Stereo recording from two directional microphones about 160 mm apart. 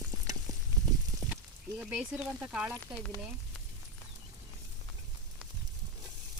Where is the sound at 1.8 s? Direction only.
10° right (ahead or behind).